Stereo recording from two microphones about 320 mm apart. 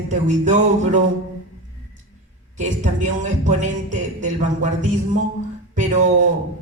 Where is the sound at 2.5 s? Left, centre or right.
Right.